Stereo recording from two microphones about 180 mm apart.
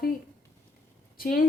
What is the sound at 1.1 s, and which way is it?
Speech, 55° left (ahead or behind).